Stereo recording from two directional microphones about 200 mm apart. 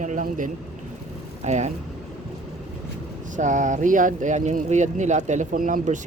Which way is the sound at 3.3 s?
40° right (ahead or behind).